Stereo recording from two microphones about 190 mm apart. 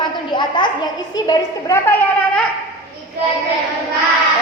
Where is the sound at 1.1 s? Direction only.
20° left (ahead or behind).